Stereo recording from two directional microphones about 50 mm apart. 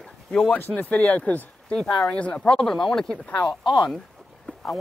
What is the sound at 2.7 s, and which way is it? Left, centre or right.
Speech, centre.